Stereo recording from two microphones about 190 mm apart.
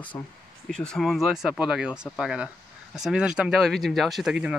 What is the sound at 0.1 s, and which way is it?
Speech, 15° left (ahead or behind).